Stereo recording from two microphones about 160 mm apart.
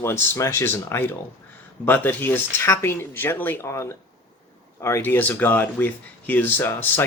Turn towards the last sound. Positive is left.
turn(degrees=10)  # may be behind; listen again after turning